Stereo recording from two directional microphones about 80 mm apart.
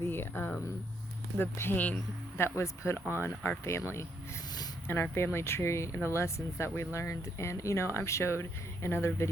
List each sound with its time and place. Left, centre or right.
0.0 s speech: left
2.4 s speech: left
5.1 s speech: left